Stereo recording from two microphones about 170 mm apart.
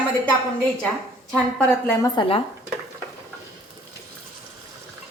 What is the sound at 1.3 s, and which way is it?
Speech, 5° left (ahead or behind).